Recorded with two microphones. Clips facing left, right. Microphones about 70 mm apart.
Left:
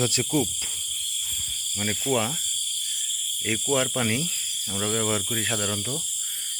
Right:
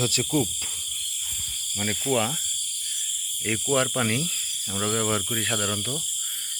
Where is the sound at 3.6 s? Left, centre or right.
Centre.